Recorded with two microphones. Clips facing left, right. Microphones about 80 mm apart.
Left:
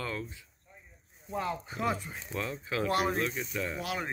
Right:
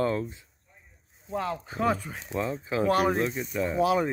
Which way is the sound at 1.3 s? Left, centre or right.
Right.